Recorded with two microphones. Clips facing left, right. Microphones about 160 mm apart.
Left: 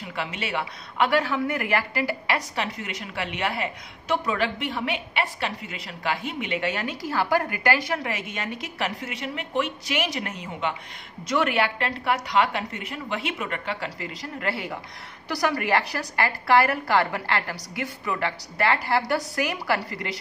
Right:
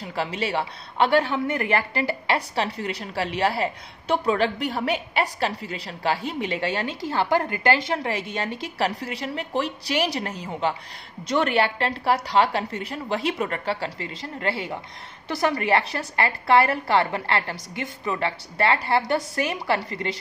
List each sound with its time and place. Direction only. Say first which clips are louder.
0.0 s a woman's voice: right 4 dB; 35° right (ahead or behind)